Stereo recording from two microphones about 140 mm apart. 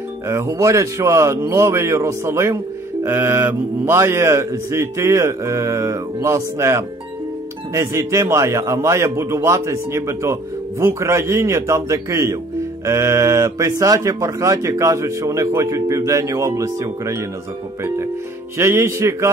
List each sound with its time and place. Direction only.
0.3 s a man's voice: 20° right (ahead or behind)
18.6 s a man's voice: 20° right (ahead or behind)